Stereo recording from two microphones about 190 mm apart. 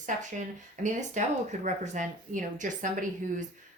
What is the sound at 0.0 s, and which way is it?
Speech, 40° right (ahead or behind).